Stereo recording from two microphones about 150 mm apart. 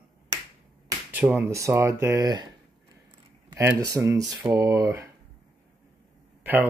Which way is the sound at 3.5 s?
20° right (ahead or behind).